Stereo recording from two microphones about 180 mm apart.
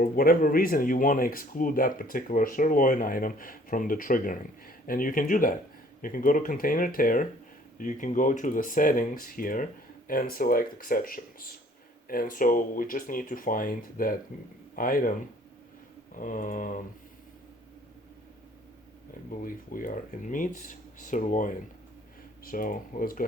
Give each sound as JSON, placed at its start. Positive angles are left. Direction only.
{"t": 0.0, "sound": "speech", "side_deg": 55}
{"t": 16.1, "sound": "speech", "side_deg": 45}
{"t": 19.4, "sound": "speech", "side_deg": 50}